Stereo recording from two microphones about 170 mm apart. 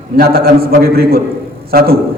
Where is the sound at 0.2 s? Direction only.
65° right (ahead or behind).